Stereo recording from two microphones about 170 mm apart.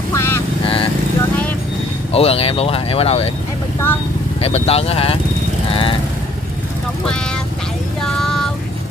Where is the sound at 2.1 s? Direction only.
35° left (ahead or behind).